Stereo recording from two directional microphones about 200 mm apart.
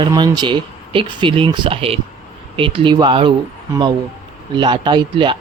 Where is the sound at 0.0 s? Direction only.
20° right (ahead or behind).